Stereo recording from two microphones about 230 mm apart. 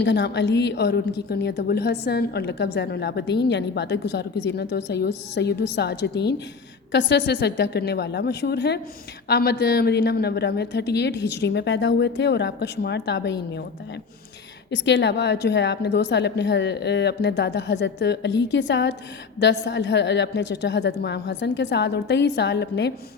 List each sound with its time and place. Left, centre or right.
0.0 s a woman's voice: left
14.7 s a woman's voice: left